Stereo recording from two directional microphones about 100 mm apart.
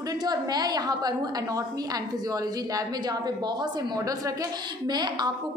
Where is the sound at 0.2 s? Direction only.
40° right (ahead or behind).